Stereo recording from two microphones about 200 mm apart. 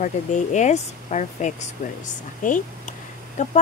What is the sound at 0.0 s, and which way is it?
Speech, 35° left (ahead or behind).